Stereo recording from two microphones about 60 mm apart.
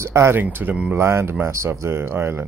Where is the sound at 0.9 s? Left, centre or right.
Right.